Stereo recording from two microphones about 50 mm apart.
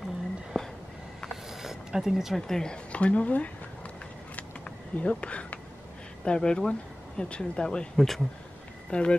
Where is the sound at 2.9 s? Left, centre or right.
Left.